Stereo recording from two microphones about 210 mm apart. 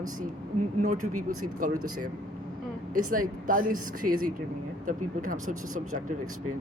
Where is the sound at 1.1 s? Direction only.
90° right.